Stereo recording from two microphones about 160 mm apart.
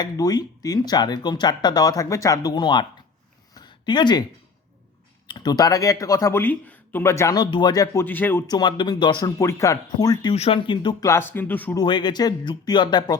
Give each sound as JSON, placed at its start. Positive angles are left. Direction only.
{"t": 0.0, "sound": "speech", "side_deg": 25}
{"t": 3.5, "sound": "a sound", "side_deg": 25}
{"t": 5.3, "sound": "speech", "side_deg": 25}
{"t": 8.0, "sound": "speech", "side_deg": 10}
{"t": 8.4, "sound": "speech", "side_deg": 25}
{"t": 10.3, "sound": "speech", "side_deg": 35}
{"t": 11.1, "sound": "speech", "side_deg": 15}
{"t": 11.8, "sound": "speech", "side_deg": 30}